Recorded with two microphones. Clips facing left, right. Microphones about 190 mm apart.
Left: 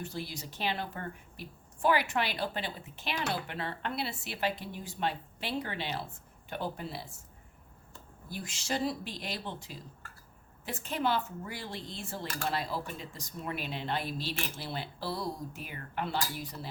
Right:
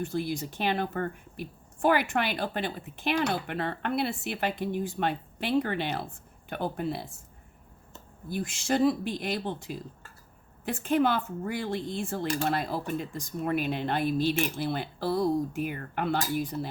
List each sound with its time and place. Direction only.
0.0 s speech: 50° right (ahead or behind)
8.3 s speech: 50° right (ahead or behind)